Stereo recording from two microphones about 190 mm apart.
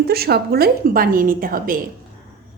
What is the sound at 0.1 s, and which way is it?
A woman's voice, 55° right (ahead or behind).